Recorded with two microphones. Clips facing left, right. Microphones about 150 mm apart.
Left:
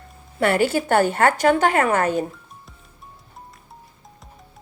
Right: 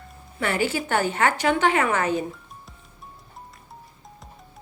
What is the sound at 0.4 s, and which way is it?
A woman's voice, 55° left (ahead or behind).